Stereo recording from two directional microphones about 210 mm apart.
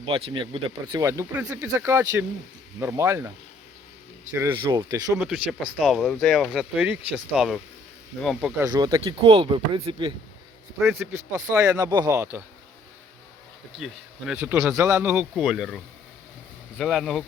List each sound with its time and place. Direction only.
0.0 s speech: 25° right (ahead or behind); by 8.6 s 5° right (ahead or behind)
8.6 s speech: 20° right (ahead or behind)
10.8 s speech: centre (ahead or behind)
11.1 s speech: 15° right (ahead or behind)
13.7 s speech: centre (ahead or behind)